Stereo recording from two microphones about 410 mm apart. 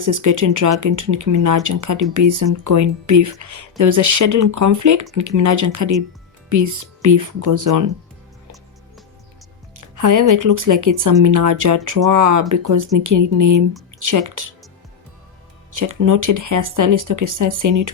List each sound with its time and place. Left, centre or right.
0.0 s speech: right
9.9 s speech: right
15.7 s speech: right